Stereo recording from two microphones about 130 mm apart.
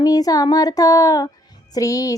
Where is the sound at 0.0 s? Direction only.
30° left (ahead or behind).